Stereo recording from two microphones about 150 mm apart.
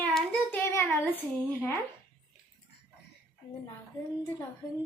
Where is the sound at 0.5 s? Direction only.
15° left (ahead or behind).